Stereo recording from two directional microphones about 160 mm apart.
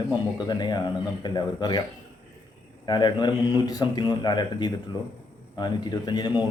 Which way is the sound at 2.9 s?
25° left (ahead or behind).